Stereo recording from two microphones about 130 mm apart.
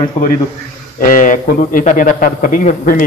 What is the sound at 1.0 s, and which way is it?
A man's voice, 90° left.